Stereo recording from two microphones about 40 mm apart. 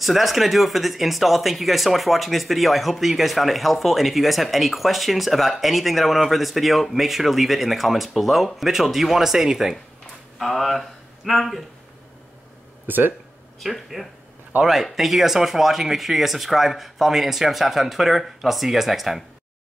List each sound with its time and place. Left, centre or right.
0.0 s speech: centre
10.4 s speech: centre
12.8 s speech: right
13.6 s speech: centre